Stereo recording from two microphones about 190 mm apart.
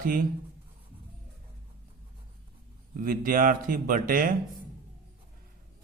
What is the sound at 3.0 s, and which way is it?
Speech, 45° right (ahead or behind).